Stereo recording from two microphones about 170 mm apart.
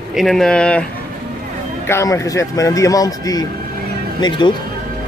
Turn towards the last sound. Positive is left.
turn(degrees=25)  # may be behind; listen again after turning